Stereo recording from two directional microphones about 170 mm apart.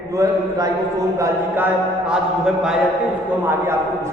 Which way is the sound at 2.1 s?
5° right (ahead or behind).